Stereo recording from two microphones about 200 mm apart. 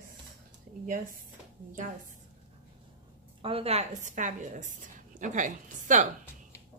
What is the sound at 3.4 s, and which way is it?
A woman's voice, 30° right (ahead or behind).